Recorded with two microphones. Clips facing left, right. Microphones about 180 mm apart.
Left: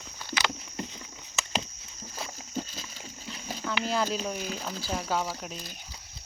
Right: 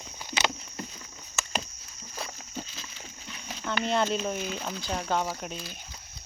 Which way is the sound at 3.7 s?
5° left (ahead or behind).